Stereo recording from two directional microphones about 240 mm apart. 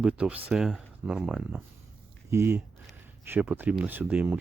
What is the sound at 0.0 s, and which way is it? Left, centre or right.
Speech, centre.